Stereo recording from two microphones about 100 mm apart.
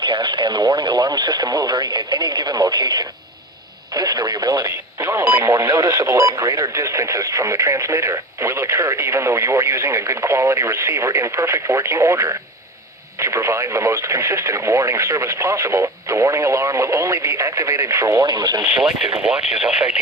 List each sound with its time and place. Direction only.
0.0 s speech: 50° right (ahead or behind); by 18.3 s 35° right (ahead or behind)
18.3 s speech: 45° right (ahead or behind)
18.6 s speech: 5° right (ahead or behind)